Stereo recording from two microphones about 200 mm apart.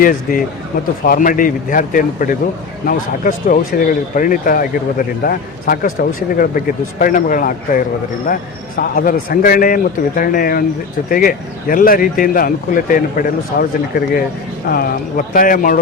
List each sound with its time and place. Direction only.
0.0 s speech: 45° left (ahead or behind)
8.8 s speech: 45° left (ahead or behind)